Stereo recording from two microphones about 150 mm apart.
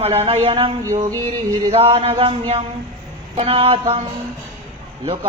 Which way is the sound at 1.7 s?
40° right (ahead or behind).